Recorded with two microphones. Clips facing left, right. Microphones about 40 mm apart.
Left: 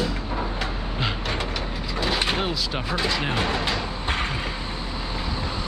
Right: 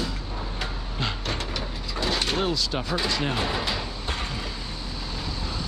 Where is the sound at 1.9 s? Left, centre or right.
Centre.